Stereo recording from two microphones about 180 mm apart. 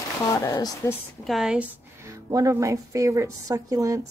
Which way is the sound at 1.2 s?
Centre (ahead or behind).